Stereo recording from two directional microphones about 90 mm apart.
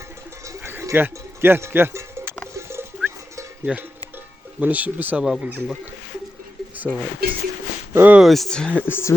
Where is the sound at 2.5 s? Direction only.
30° right (ahead or behind).